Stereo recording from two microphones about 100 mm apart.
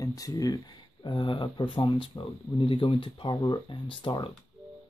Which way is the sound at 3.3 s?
40° left (ahead or behind).